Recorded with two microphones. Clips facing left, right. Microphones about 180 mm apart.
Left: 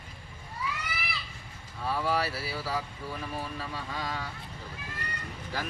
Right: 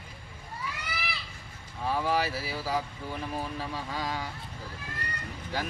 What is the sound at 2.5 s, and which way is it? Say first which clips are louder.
Speech: right 2 dB; 25° right (ahead or behind).